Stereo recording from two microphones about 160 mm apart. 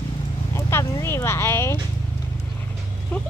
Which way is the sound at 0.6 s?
15° left (ahead or behind).